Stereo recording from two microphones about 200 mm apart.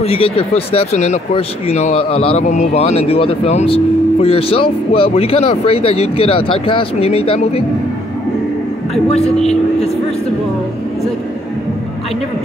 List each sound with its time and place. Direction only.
0.0 s speech: 30° left (ahead or behind)